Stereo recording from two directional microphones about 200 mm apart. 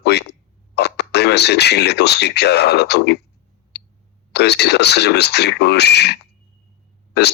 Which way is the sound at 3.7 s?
55° left (ahead or behind).